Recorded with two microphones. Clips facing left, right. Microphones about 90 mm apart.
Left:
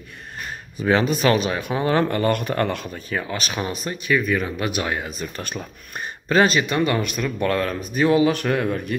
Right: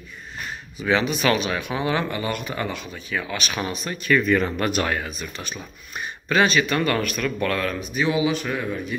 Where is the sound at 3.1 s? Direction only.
35° left (ahead or behind).